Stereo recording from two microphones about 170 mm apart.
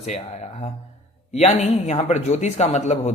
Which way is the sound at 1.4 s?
40° left (ahead or behind).